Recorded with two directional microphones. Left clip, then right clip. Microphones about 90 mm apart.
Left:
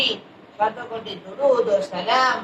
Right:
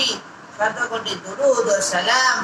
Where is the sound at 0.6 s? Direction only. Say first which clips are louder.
Right 3 dB; 35° right (ahead or behind).